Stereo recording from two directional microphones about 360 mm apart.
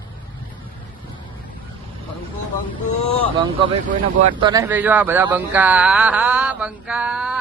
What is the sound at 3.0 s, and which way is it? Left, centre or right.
Vehicle, centre.